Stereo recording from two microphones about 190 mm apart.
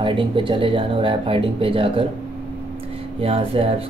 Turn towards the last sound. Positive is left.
turn(degrees=-30)  # may be behind; listen again after turning